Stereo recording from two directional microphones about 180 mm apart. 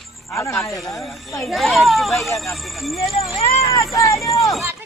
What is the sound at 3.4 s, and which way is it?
Speech, 35° left (ahead or behind).